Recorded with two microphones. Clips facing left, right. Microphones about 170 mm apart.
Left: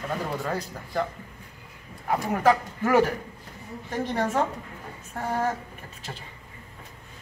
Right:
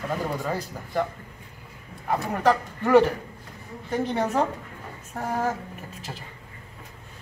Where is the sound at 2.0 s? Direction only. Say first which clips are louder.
Even; 5° left (ahead or behind).